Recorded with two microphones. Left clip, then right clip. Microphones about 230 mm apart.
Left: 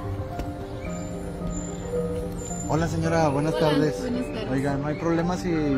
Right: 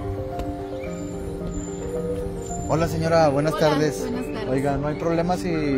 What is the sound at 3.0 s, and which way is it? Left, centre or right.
Speech, right.